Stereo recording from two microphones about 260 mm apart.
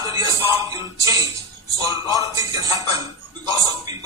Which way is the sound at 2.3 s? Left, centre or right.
Centre.